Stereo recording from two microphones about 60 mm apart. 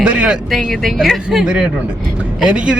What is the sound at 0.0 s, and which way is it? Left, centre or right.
Vehicle, centre.